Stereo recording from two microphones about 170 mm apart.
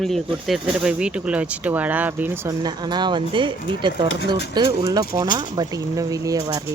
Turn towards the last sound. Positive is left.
turn(degrees=-20)  # may be behind; listen again after turning